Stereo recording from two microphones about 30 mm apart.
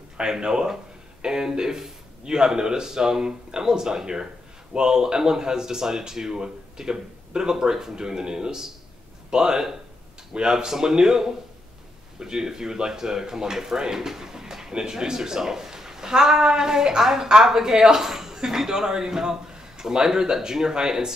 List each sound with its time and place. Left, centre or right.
0.2 s speech: right